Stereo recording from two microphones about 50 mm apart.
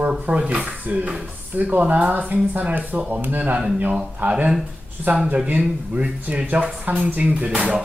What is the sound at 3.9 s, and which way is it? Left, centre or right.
Speech, right.